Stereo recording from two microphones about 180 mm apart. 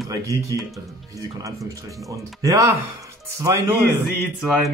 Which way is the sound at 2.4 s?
20° right (ahead or behind).